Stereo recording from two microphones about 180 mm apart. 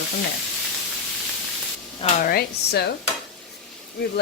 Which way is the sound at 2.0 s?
40° left (ahead or behind).